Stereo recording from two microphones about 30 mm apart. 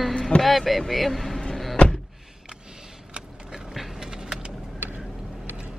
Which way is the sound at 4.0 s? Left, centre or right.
Right.